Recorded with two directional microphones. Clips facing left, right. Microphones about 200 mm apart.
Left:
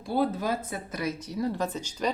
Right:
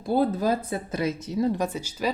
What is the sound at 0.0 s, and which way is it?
Speech, 40° right (ahead or behind).